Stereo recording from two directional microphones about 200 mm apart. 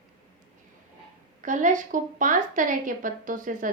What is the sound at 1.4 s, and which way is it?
A woman's voice, 40° right (ahead or behind).